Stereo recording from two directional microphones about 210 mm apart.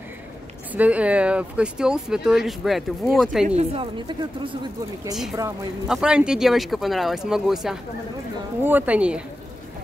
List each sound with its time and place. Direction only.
0.7 s speech: 5° right (ahead or behind)
3.4 s a woman's voice: 30° right (ahead or behind)
5.9 s speech: 5° right (ahead or behind)